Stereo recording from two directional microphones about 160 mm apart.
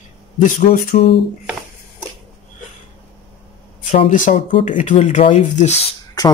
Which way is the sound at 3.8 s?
55° left (ahead or behind).